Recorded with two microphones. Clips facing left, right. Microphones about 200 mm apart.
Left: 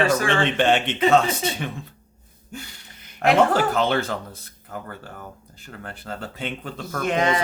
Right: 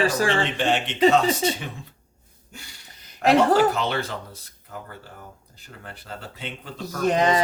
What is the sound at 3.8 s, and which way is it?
Speech, 50° left (ahead or behind).